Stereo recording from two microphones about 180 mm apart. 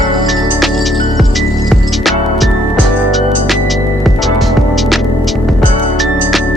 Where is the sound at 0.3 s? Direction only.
Centre (ahead or behind).